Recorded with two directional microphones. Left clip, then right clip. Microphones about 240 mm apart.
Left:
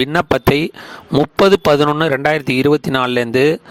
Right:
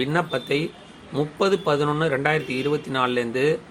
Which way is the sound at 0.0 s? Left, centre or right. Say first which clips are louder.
Left 10 dB; left.